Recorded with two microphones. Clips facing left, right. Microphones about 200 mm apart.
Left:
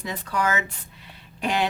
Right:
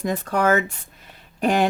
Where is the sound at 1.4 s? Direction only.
50° right (ahead or behind).